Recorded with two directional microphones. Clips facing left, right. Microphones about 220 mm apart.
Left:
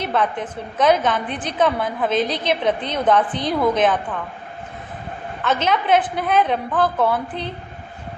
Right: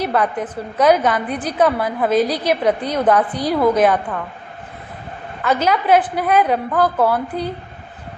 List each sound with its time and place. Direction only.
0.0 s a woman's voice: 5° right (ahead or behind)
5.5 s a woman's voice: 10° right (ahead or behind)